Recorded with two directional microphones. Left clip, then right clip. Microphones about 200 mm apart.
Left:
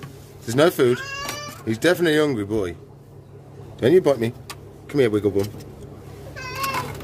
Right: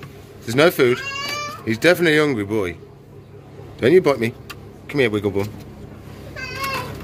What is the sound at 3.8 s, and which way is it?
A man's voice, 15° left (ahead or behind).